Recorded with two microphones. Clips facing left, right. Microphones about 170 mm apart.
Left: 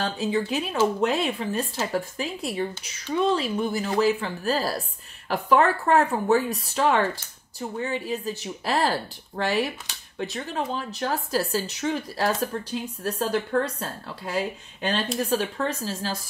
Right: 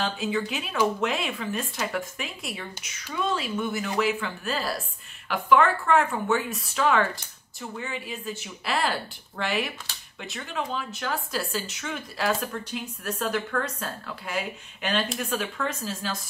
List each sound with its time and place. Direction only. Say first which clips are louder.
0.0 s speech: left 2 dB; 35° left (ahead or behind)